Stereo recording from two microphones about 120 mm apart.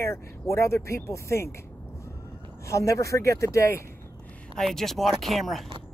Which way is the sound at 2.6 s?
25° left (ahead or behind).